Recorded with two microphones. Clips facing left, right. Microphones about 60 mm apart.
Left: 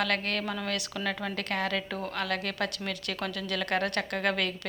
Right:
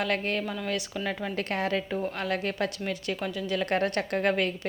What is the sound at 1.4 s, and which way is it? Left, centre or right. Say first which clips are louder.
Speech: right 2 dB; right.